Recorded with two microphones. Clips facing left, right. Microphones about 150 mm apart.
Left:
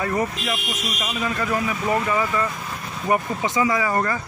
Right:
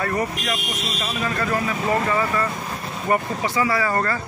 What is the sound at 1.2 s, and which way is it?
Speech, 15° left (ahead or behind).